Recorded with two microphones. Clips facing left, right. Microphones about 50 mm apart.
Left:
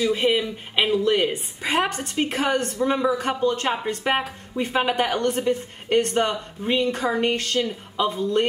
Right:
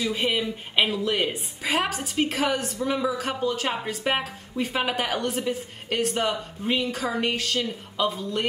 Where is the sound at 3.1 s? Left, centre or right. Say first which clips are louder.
Left 4 dB; centre.